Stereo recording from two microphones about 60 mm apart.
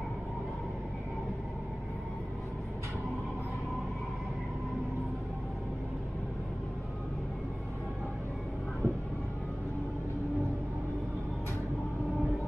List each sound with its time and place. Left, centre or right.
8.8 s vehicle: right